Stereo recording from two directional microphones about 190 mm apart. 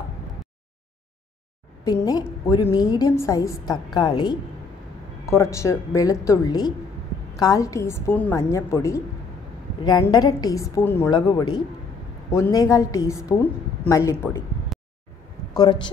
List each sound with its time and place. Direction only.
1.9 s a woman's voice: 20° left (ahead or behind)
11.1 s a woman's voice: 25° left (ahead or behind)
14.7 s a sound: centre (ahead or behind)
15.5 s a woman's voice: 20° left (ahead or behind)